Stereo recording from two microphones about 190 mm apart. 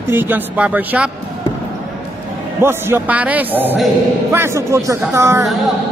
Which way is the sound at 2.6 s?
10° right (ahead or behind).